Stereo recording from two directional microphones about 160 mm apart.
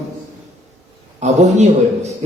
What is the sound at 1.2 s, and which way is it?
Speech, 45° right (ahead or behind).